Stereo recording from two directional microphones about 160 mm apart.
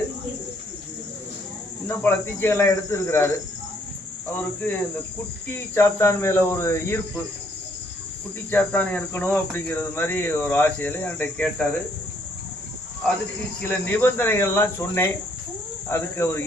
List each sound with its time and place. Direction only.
2.0 s speech: 15° left (ahead or behind)
5.5 s speech: 15° left (ahead or behind)
8.4 s speech: 10° left (ahead or behind)
13.6 s speech: 10° left (ahead or behind)